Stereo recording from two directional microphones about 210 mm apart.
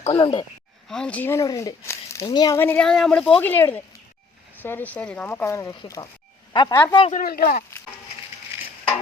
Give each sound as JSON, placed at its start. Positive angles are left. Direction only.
{"t": 0.0, "sound": "speech", "side_deg": 25}
{"t": 0.9, "sound": "speech", "side_deg": 5}
{"t": 7.1, "sound": "speech", "side_deg": 40}